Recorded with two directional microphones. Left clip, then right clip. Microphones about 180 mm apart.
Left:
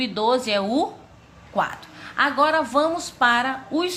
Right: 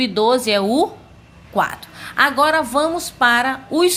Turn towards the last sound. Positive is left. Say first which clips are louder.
# right 7 dB
turn(degrees=-40)  # may be behind; listen again after turning